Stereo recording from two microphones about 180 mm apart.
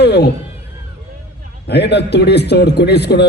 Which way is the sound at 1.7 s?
70° left (ahead or behind).